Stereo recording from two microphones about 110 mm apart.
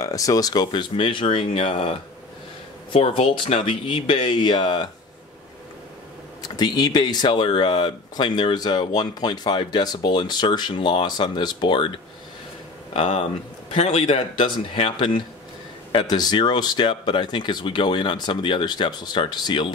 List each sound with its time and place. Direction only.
0.0 s speech: 30° left (ahead or behind)
6.4 s speech: 35° left (ahead or behind)
12.9 s a man's voice: 60° left (ahead or behind); by 19.7 s 45° left (ahead or behind)